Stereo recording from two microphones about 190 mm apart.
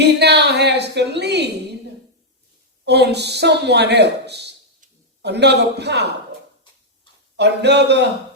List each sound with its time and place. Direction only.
0.0 s a sound: 60° right (ahead or behind)
2.8 s speech: 60° right (ahead or behind)
7.3 s speech: 60° right (ahead or behind)